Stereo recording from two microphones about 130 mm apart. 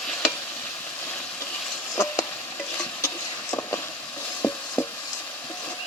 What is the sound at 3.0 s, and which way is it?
Vehicle, 20° left (ahead or behind).